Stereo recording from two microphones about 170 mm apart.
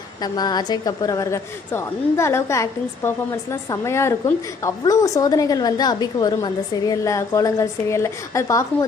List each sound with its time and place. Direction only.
0.2 s a woman's voice: 25° left (ahead or behind)